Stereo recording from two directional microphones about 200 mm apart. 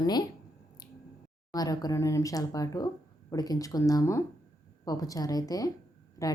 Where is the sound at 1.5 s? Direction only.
20° left (ahead or behind).